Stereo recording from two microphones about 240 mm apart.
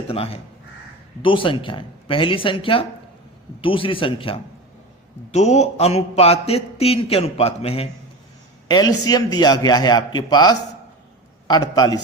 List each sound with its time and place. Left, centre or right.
0.1 s a man's voice: left